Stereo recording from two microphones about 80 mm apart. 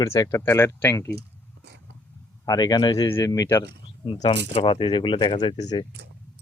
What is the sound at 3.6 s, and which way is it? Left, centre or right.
Speech, left.